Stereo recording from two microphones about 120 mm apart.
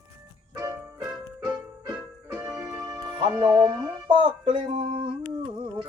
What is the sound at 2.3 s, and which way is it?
Keyboard, 25° right (ahead or behind).